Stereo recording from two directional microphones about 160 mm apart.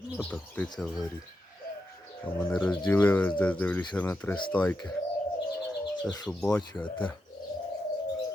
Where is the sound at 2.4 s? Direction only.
5° left (ahead or behind).